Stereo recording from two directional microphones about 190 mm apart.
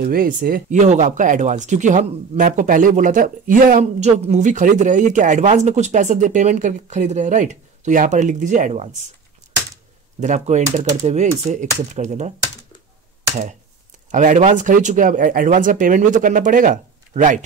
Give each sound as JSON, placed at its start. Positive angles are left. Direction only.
{"t": 0.0, "sound": "speech", "side_deg": -50}
{"t": 9.4, "sound": "a sound", "side_deg": -40}
{"t": 10.2, "sound": "speech", "side_deg": -40}
{"t": 14.1, "sound": "speech", "side_deg": -40}